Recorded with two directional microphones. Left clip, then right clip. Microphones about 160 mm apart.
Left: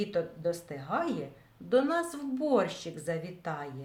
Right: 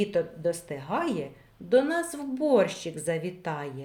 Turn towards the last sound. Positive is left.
turn(degrees=-20)  # may be behind; listen again after turning